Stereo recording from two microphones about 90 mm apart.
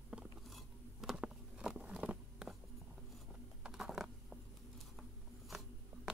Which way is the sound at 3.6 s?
5° right (ahead or behind).